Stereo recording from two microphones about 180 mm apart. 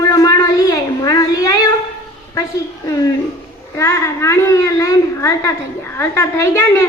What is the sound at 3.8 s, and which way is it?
A child's voice, 15° left (ahead or behind).